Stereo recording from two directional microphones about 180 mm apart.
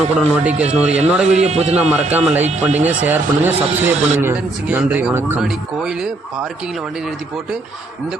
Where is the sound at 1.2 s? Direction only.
40° right (ahead or behind).